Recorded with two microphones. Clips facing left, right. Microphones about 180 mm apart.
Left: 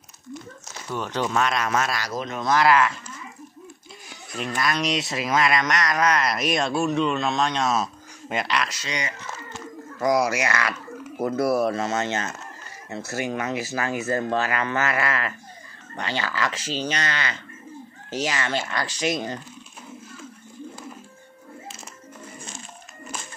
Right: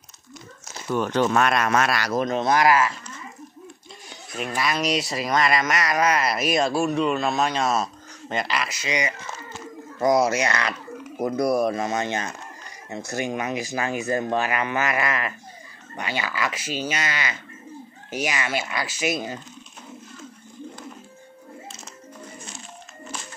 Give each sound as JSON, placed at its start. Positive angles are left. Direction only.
{"t": 0.9, "sound": "speech", "side_deg": -50}
{"t": 2.2, "sound": "speech", "side_deg": -30}
{"t": 2.5, "sound": "speech", "side_deg": -15}
{"t": 4.1, "sound": "speech", "side_deg": -5}
{"t": 9.9, "sound": "speech", "side_deg": -25}